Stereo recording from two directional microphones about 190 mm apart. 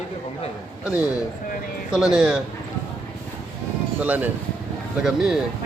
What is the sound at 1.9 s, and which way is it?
Speech, 5° right (ahead or behind).